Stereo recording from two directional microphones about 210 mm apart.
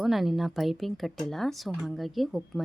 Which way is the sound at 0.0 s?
Centre (ahead or behind).